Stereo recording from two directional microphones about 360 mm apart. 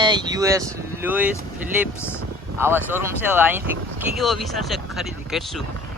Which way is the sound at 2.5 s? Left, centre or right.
Centre.